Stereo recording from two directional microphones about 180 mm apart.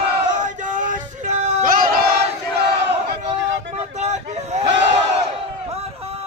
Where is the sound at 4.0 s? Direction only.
40° right (ahead or behind).